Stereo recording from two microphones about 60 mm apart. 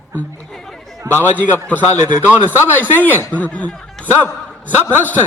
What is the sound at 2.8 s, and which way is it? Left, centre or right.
Speech, left.